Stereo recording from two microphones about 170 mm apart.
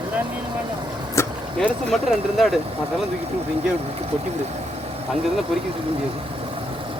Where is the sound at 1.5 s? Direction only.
Centre (ahead or behind).